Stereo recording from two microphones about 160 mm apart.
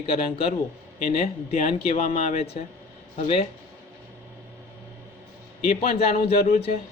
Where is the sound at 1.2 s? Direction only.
50° left (ahead or behind).